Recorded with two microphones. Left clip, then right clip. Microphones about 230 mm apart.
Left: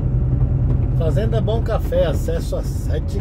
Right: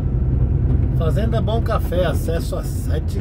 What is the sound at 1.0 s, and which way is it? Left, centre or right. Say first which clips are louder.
Speech: left 2 dB; centre.